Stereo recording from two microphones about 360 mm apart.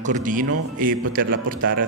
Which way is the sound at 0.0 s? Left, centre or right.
Right.